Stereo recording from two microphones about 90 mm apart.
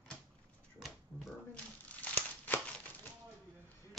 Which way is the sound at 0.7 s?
Centre (ahead or behind).